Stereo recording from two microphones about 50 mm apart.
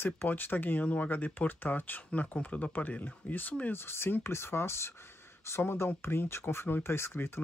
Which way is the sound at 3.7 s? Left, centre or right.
Left.